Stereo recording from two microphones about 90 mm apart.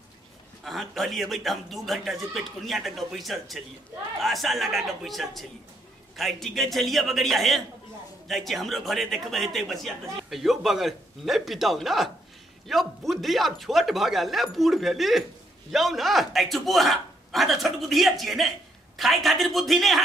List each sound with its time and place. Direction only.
0.7 s speech: centre (ahead or behind)